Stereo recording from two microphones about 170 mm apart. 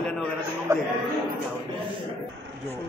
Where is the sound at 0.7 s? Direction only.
15° right (ahead or behind).